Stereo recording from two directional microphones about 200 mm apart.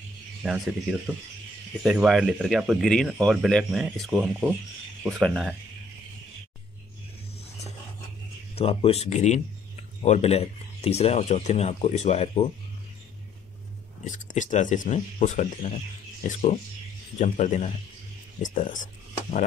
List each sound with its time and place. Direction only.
0.4 s speech: 5° right (ahead or behind)
8.5 s speech: 30° left (ahead or behind)
14.0 s speech: 40° left (ahead or behind)